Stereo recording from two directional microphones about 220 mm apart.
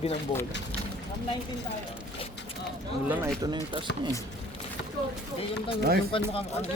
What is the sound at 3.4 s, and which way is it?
Speech, 20° right (ahead or behind).